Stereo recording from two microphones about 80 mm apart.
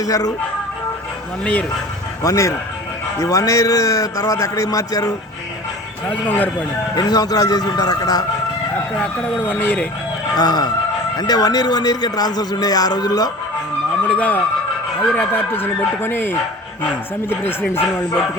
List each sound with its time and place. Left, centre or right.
0.0 s a man's voice: left
2.2 s a man's voice: left
6.1 s speech: centre
6.9 s a man's voice: left
9.5 s speech: left
10.3 s a man's voice: left
14.1 s speech: centre